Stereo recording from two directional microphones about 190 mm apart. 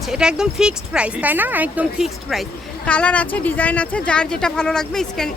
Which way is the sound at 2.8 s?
5° left (ahead or behind).